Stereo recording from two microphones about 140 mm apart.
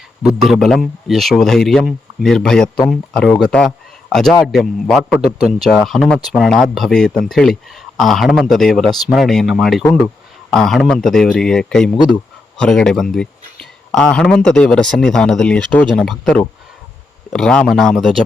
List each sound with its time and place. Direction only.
0.2 s speech: 5° right (ahead or behind)